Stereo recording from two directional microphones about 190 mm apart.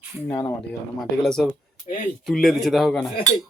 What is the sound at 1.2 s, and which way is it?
A man's voice, centre (ahead or behind).